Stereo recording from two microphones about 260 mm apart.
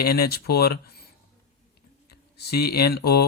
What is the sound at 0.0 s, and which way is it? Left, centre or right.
Speech, left.